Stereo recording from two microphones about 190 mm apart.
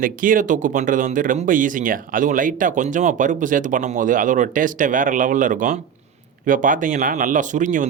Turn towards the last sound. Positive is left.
turn(degrees=-40)  # may be behind; listen again after turning